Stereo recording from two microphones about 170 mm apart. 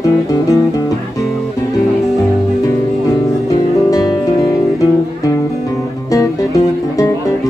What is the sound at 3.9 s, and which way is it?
Music, 20° left (ahead or behind).